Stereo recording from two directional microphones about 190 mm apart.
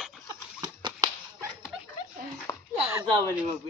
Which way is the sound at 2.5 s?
20° left (ahead or behind).